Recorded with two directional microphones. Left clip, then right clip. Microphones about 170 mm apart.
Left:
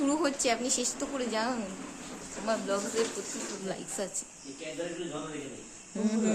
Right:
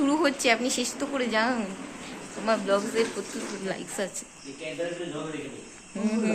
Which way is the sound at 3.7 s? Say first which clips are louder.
Right 5 dB; 10° left (ahead or behind).